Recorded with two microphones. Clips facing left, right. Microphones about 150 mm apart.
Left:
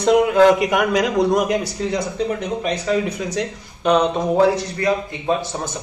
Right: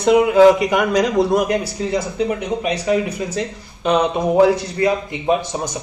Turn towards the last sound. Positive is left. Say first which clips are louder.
# right 2 dB
turn(degrees=-15)  # may be behind; listen again after turning